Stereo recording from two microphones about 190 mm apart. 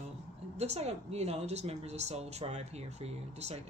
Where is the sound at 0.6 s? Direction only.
35° right (ahead or behind).